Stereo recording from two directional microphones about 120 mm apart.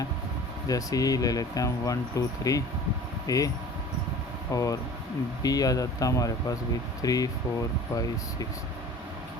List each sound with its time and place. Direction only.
0.7 s speech: 30° left (ahead or behind)
4.5 s speech: 30° left (ahead or behind)